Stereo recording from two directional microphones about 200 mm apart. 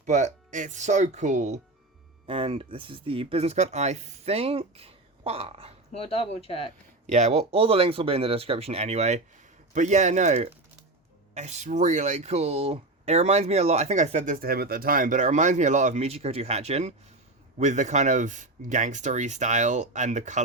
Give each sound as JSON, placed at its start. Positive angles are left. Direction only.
{"t": 0.0, "sound": "speech", "side_deg": -35}
{"t": 5.9, "sound": "speech", "side_deg": 30}
{"t": 7.1, "sound": "speech", "side_deg": -35}